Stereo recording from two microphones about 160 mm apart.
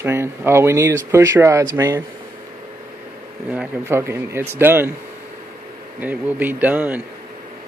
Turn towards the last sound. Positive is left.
turn(degrees=-10)  # may be behind; listen again after turning